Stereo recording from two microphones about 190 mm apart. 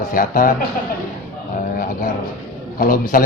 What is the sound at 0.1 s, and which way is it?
Speech, 45° left (ahead or behind).